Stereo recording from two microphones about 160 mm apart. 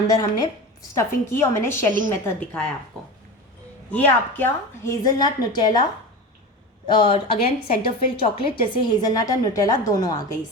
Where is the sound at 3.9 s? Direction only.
10° left (ahead or behind).